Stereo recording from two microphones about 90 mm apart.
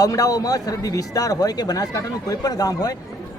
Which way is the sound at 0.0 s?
45° left (ahead or behind).